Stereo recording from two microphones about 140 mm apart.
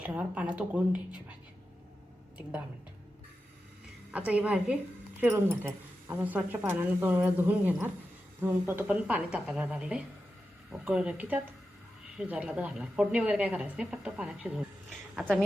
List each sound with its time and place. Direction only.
0.0 s speech: 10° right (ahead or behind)
4.3 s speech: 10° right (ahead or behind)